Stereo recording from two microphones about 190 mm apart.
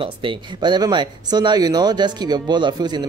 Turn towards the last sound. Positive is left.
turn(degrees=-20)  # may be behind; listen again after turning